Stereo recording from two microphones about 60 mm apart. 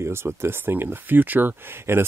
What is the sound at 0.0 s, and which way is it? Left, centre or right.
Speech, right.